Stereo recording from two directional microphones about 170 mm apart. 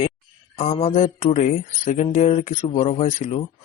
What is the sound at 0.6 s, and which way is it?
A man's voice, 40° left (ahead or behind).